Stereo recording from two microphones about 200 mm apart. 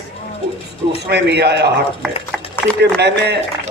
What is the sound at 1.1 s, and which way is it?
Speech, 55° right (ahead or behind).